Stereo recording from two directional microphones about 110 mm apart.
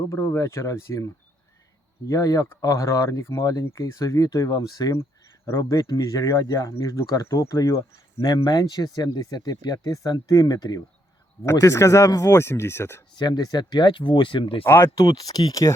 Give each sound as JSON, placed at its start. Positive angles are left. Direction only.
{"t": 0.1, "sound": "speech", "side_deg": 25}
{"t": 13.1, "sound": "speech", "side_deg": 40}
{"t": 14.6, "sound": "speech", "side_deg": 20}
{"t": 15.1, "sound": "speech", "side_deg": 35}